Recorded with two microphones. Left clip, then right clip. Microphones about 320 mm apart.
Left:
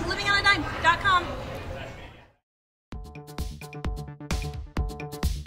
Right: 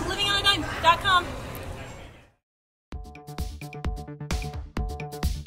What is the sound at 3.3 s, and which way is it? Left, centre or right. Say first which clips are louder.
Music: right 1 dB; centre.